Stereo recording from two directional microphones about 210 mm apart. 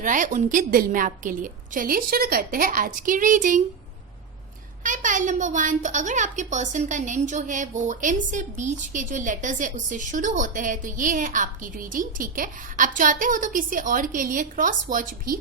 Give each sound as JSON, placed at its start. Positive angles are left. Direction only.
{"t": 0.0, "sound": "a woman's voice", "side_deg": -35}
{"t": 4.8, "sound": "a woman's voice", "side_deg": -40}